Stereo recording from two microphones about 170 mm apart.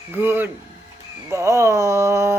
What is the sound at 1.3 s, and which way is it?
Speech, 20° right (ahead or behind).